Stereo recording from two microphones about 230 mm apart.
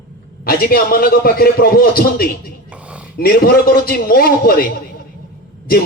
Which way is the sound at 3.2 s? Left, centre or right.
Left.